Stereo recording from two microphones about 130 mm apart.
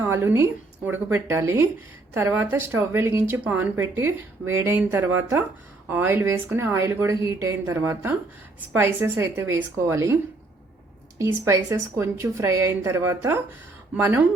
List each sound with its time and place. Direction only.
0.0 s speech: 20° right (ahead or behind)
11.2 s speech: 20° right (ahead or behind)